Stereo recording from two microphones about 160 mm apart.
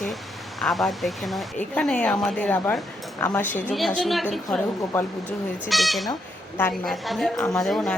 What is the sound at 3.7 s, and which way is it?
Speech, centre (ahead or behind).